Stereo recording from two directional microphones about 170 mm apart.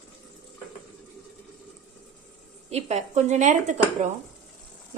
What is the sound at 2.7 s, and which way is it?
A woman's voice, 40° right (ahead or behind).